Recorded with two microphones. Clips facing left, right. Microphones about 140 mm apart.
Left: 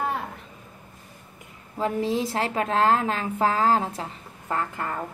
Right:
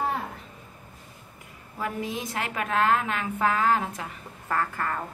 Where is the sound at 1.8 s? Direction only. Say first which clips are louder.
Left 7 dB; 30° left (ahead or behind).